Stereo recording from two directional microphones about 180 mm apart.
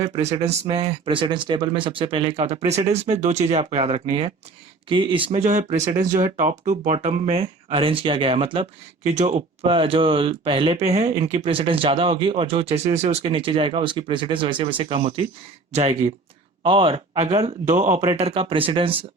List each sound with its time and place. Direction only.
0.0 s speech: 35° right (ahead or behind)
5.3 s speech: 45° right (ahead or behind)
18.2 s speech: 30° right (ahead or behind)